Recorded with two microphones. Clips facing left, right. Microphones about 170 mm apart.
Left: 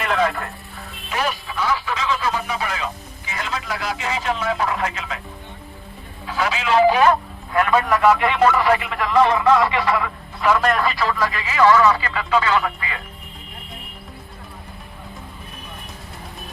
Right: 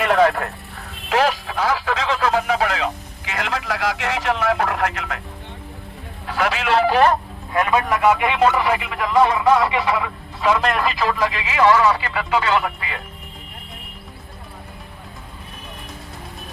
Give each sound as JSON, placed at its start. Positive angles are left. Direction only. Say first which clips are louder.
{"t": 0.0, "sound": "a sound", "louder": "right 5 dB", "side_deg": -55}
{"t": 1.1, "sound": "speech", "louder": "right 6 dB", "side_deg": -85}
{"t": 6.2, "sound": "a man's voice", "louder": "right 1 dB", "side_deg": -60}
{"t": 7.6, "sound": "a man's voice", "louder": "left 1 dB", "side_deg": -15}